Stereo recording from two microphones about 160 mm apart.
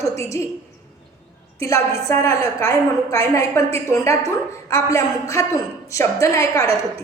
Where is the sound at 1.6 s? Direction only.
20° left (ahead or behind).